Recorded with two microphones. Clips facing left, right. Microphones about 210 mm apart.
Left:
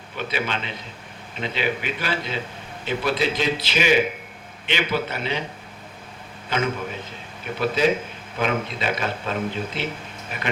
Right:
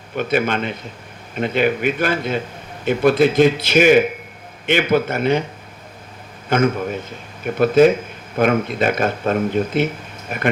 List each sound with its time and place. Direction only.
0.2 s speech: 50° right (ahead or behind)
6.5 s speech: 50° right (ahead or behind)